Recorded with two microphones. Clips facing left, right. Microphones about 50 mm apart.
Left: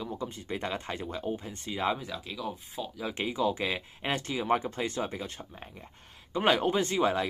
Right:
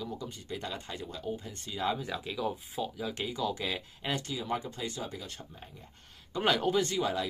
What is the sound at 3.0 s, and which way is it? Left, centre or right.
Speech, left.